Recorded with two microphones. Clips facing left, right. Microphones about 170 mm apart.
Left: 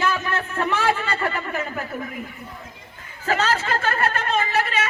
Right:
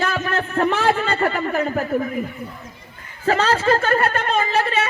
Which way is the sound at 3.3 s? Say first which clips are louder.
Right 5 dB; 35° right (ahead or behind).